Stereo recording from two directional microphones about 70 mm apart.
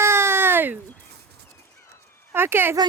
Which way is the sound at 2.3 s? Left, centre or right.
Right.